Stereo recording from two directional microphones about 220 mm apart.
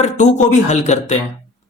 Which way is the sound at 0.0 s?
30° left (ahead or behind).